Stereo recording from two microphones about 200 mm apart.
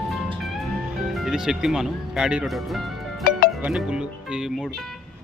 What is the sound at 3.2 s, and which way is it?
Music, 50° left (ahead or behind).